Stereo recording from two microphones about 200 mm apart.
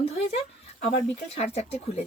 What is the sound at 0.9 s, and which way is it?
Speech, 30° left (ahead or behind).